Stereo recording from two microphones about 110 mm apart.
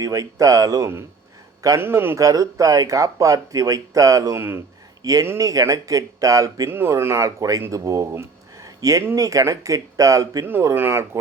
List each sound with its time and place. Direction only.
0.0 s speech: 30° right (ahead or behind)